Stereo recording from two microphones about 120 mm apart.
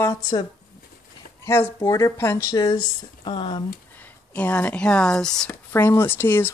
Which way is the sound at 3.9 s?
15° left (ahead or behind).